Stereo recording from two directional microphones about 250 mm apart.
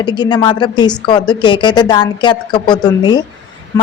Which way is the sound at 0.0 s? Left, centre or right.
Centre.